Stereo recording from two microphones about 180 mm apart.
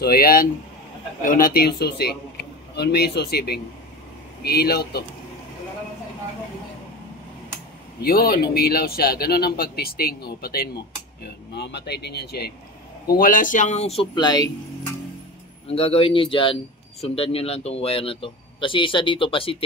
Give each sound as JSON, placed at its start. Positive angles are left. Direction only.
{"t": 0.0, "sound": "speech", "side_deg": 55}
{"t": 8.0, "sound": "speech", "side_deg": 60}
{"t": 11.2, "sound": "speech", "side_deg": 70}
{"t": 15.7, "sound": "speech", "side_deg": 35}